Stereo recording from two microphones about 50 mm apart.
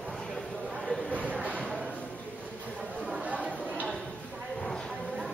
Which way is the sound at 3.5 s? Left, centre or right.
Left.